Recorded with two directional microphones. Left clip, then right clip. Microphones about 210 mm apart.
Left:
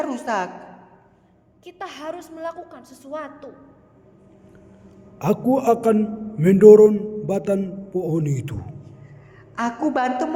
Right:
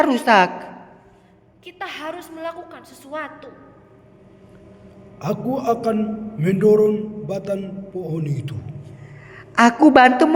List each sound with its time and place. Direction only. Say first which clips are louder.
0.0 s a woman's voice: right 10 dB; 5° right (ahead or behind)
1.6 s a woman's voice: right 2 dB; 25° left (ahead or behind)
5.2 s a man's voice: left 3 dB; 40° left (ahead or behind)
9.6 s a woman's voice: right 11 dB; 15° right (ahead or behind)